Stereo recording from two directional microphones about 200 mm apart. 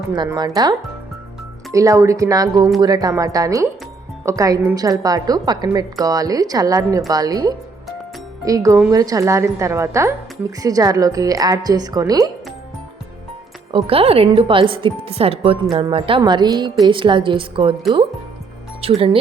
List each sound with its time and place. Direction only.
0.2 s a woman's voice: 20° right (ahead or behind)
13.7 s speech: 30° right (ahead or behind)
18.8 s speech: 30° right (ahead or behind)